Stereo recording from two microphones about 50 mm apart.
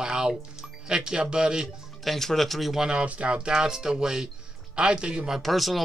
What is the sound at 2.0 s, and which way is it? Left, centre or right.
Speech, centre.